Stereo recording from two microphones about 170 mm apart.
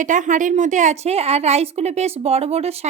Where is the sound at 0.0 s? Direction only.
50° right (ahead or behind).